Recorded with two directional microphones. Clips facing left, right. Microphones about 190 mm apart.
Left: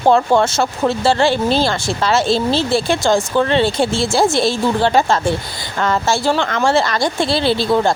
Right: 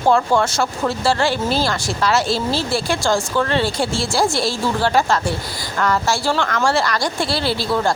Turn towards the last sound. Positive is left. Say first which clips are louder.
# left 5 dB
turn(degrees=20)  # may be behind; listen again after turning